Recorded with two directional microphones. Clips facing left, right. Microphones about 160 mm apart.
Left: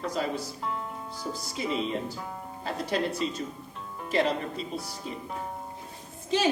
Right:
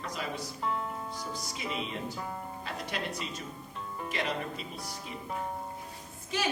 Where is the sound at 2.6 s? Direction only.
35° left (ahead or behind).